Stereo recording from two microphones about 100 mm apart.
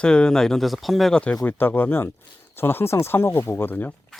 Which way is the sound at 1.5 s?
20° left (ahead or behind).